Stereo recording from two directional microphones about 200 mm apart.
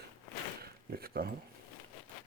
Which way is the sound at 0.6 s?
50° right (ahead or behind).